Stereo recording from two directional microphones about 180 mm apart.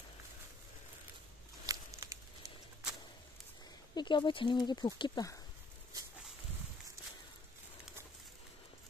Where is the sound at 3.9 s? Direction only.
25° left (ahead or behind).